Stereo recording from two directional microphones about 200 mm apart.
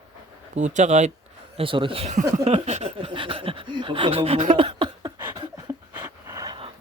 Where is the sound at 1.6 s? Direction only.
25° right (ahead or behind).